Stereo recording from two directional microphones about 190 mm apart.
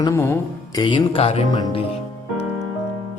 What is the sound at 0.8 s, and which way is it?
Speech, 25° left (ahead or behind).